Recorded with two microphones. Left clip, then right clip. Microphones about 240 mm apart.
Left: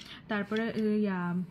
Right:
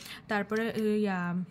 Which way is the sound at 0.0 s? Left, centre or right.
Right.